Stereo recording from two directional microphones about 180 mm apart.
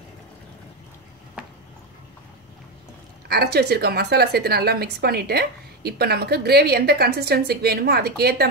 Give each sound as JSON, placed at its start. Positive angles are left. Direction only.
{"t": 3.3, "sound": "a woman's voice", "side_deg": -65}